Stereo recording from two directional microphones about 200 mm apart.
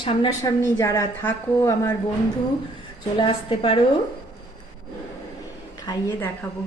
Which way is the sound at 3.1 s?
25° left (ahead or behind).